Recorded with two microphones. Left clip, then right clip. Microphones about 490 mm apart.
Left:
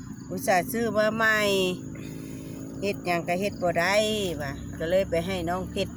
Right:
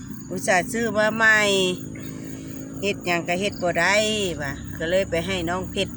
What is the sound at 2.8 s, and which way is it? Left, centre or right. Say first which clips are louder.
Speech: right 3 dB; left.